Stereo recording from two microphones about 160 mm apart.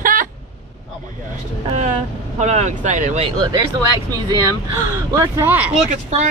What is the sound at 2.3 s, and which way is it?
Speech, 45° right (ahead or behind).